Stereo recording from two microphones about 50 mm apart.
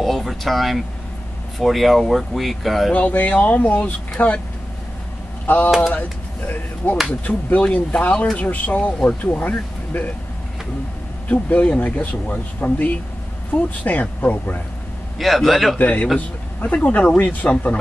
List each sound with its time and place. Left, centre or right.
0.0 s speech: centre
3.1 s speech: left
5.5 s speech: left
11.2 s speech: left
15.1 s speech: centre
15.8 s speech: left